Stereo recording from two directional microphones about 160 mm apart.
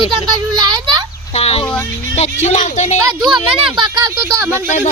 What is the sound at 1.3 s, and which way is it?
Speech, 40° left (ahead or behind).